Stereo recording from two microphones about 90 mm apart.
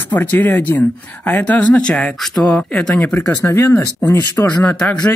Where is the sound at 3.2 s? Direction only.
35° left (ahead or behind).